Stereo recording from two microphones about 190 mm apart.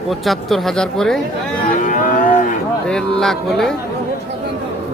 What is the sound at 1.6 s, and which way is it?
Cattle, 40° left (ahead or behind).